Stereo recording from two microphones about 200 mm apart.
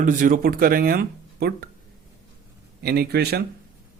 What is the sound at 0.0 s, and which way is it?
Speech, 40° right (ahead or behind).